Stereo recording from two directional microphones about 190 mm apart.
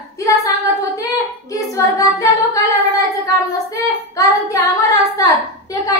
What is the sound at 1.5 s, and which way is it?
Singing, 15° left (ahead or behind).